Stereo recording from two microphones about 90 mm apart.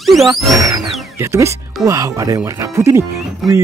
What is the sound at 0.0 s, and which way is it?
Music, centre (ahead or behind).